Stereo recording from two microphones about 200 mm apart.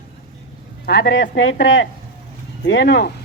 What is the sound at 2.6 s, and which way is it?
Speech, 60° left (ahead or behind).